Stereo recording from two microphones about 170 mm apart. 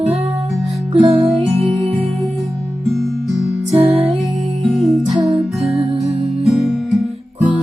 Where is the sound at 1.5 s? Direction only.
35° right (ahead or behind).